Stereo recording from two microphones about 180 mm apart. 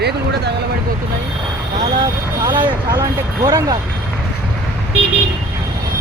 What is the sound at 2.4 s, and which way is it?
Speech, 20° right (ahead or behind).